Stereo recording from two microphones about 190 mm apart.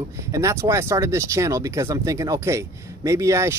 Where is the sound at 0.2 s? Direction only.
15° right (ahead or behind).